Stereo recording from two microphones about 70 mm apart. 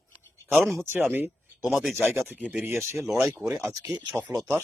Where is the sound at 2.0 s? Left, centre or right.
Right.